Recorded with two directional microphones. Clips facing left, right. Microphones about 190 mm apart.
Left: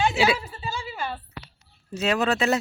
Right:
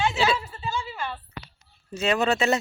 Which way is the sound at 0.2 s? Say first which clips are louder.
Left 2 dB; 10° left (ahead or behind).